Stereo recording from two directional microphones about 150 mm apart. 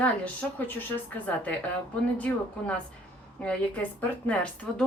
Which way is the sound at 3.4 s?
10° left (ahead or behind).